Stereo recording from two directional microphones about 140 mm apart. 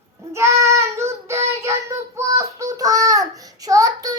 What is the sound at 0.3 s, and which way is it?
Child singing, 20° right (ahead or behind).